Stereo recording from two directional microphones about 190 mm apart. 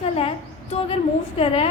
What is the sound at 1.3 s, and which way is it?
Speech, 30° left (ahead or behind).